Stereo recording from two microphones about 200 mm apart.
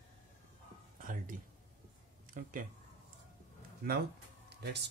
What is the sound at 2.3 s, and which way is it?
Speech, 40° right (ahead or behind).